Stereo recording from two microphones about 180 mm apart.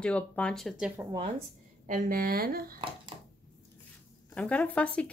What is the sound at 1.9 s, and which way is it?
Speech, 50° right (ahead or behind).